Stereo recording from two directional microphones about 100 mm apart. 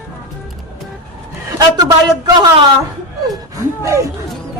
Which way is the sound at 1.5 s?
40° right (ahead or behind).